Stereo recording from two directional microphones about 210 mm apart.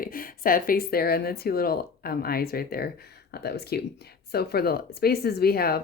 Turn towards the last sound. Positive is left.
turn(degrees=50)  # may be behind; listen again after turning